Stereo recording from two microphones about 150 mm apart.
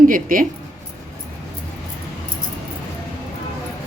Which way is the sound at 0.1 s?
65° right (ahead or behind).